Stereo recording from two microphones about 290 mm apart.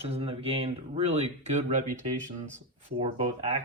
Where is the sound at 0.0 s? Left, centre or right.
Centre.